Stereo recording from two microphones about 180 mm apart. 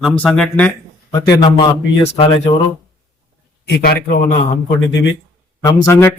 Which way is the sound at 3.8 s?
55° left (ahead or behind).